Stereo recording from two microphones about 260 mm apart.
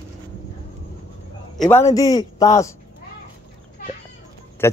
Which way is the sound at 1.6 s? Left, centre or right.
Centre.